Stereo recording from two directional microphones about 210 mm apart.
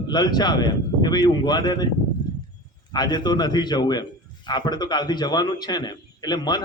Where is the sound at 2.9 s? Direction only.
20° left (ahead or behind).